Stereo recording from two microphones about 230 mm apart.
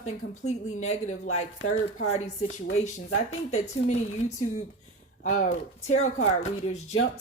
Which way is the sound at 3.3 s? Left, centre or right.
Left.